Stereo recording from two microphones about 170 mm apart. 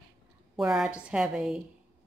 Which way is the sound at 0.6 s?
5° right (ahead or behind).